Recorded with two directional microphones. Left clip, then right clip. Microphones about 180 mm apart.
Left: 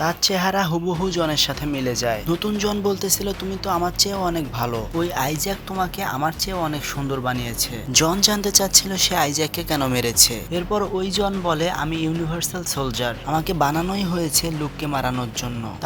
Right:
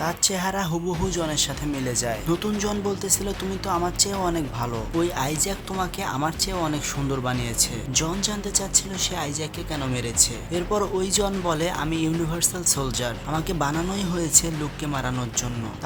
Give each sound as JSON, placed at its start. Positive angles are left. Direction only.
{"t": 0.0, "sound": "speech", "side_deg": 25}
{"t": 7.9, "sound": "speech", "side_deg": 40}
{"t": 10.5, "sound": "speech", "side_deg": 20}